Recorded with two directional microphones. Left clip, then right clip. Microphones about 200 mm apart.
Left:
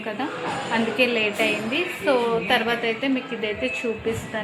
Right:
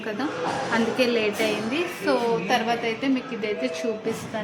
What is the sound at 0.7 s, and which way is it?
A woman's voice, 5° right (ahead or behind).